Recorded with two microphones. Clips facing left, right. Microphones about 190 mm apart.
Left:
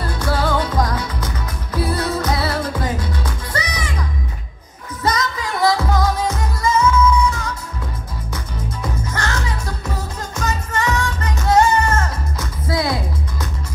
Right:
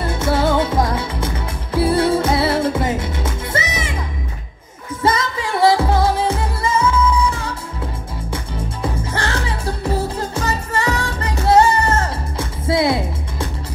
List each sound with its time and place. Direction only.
0.0 s music: 25° right (ahead or behind)
5.0 s music: 25° right (ahead or behind)
8.8 s music: 30° right (ahead or behind)